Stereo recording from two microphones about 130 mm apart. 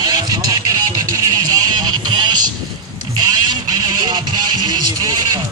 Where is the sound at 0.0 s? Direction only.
30° right (ahead or behind).